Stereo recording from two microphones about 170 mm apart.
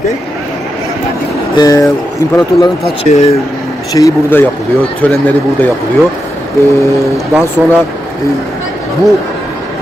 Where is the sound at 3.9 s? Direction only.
20° left (ahead or behind).